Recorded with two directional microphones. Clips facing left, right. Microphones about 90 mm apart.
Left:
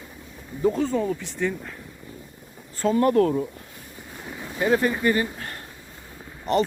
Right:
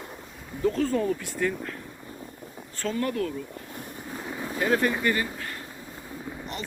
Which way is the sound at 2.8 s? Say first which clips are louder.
Left 8 dB; 30° left (ahead or behind).